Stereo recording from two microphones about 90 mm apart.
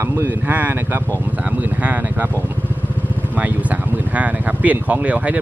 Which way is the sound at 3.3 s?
15° right (ahead or behind).